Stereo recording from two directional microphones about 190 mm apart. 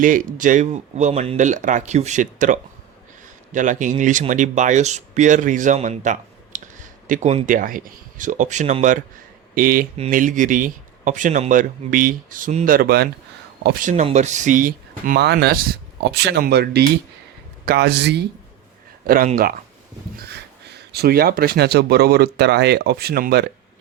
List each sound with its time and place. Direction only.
0.0 s a man's voice: 45° right (ahead or behind); by 13.8 s 60° right (ahead or behind)
13.8 s a man's voice: 35° right (ahead or behind); by 18.3 s 65° right (ahead or behind)
19.0 s speech: 50° right (ahead or behind)